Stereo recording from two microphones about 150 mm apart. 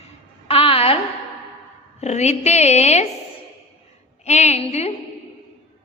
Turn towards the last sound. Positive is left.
turn(degrees=45)  # may be behind; listen again after turning